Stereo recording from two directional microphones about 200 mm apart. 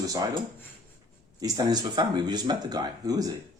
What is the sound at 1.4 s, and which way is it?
Speech, 20° right (ahead or behind).